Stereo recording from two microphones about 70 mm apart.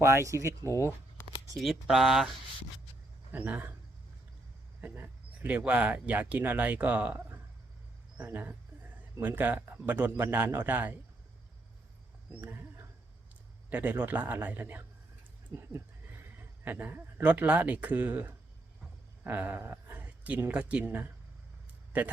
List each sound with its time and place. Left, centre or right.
0.0 s speech: right
1.5 s speech: centre
3.3 s speech: right
4.8 s speech: right
12.3 s speech: right